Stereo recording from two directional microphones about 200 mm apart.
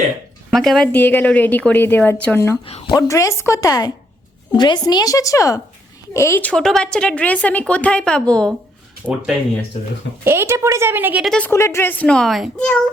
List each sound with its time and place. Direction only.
0.5 s a woman's voice: centre (ahead or behind)
10.2 s a woman's voice: 10° right (ahead or behind)